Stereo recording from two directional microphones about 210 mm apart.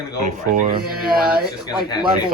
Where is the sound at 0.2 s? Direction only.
40° right (ahead or behind).